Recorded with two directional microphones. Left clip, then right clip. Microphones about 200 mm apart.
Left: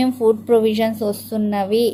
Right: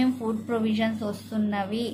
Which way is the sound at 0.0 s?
30° left (ahead or behind).